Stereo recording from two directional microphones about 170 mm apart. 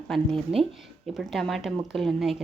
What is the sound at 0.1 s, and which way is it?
Speech, centre (ahead or behind).